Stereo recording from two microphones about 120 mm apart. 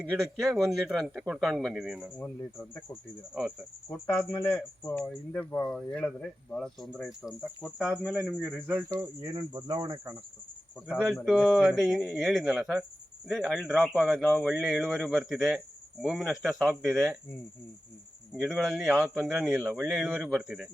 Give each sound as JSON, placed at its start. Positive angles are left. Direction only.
{"t": 0.0, "sound": "speech", "side_deg": -5}
{"t": 2.1, "sound": "speech", "side_deg": 15}
{"t": 4.1, "sound": "speech", "side_deg": 20}
{"t": 8.9, "sound": "speech", "side_deg": -30}
{"t": 10.8, "sound": "speech", "side_deg": -5}
{"t": 14.4, "sound": "speech", "side_deg": 0}
{"t": 18.3, "sound": "speech", "side_deg": 0}